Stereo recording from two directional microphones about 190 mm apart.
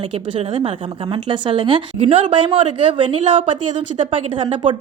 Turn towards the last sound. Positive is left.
turn(degrees=-25)  # may be behind; listen again after turning